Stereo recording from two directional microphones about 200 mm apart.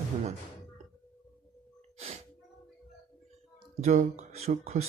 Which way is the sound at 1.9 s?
30° right (ahead or behind).